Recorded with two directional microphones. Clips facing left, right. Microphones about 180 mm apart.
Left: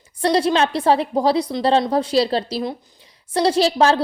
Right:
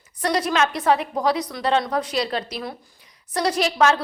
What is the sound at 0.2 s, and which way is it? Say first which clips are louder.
A woman's voice: left 4 dB; 30° left (ahead or behind).